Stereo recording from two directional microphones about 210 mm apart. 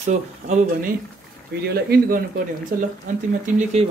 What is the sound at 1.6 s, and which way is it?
Speech, 45° right (ahead or behind).